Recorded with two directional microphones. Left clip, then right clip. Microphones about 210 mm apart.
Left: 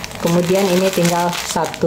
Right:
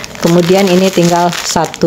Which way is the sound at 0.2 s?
35° right (ahead or behind).